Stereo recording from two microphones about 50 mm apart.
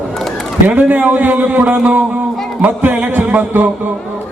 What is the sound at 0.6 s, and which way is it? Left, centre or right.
Speech, right.